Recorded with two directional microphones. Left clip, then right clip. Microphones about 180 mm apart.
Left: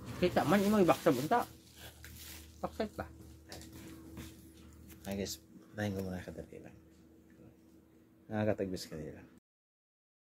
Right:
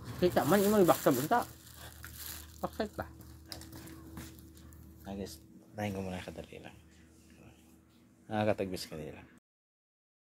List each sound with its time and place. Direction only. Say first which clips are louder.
0.2 s speech: right 2 dB; 15° right (ahead or behind)
2.6 s speech: right 2 dB; 20° right (ahead or behind)
5.0 s speech: left 3 dB; 40° left (ahead or behind)
5.8 s speech: right 1 dB; 15° left (ahead or behind)
8.3 s speech: right 3 dB; 5° left (ahead or behind)